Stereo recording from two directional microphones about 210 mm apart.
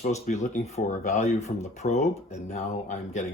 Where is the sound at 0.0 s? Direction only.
35° left (ahead or behind).